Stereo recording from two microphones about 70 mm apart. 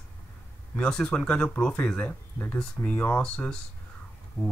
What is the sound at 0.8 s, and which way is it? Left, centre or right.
Speech, centre.